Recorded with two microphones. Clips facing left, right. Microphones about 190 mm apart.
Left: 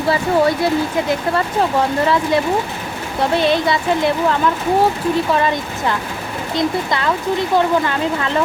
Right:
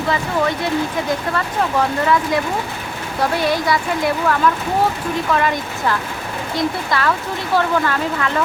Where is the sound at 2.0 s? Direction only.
30° left (ahead or behind).